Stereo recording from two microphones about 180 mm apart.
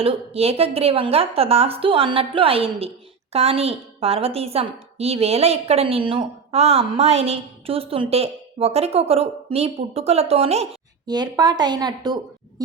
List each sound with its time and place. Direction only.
0.0 s a woman's voice: 35° right (ahead or behind)
11.0 s a woman's voice: 20° right (ahead or behind)